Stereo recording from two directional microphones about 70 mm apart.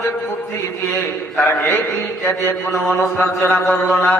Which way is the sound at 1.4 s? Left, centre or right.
Left.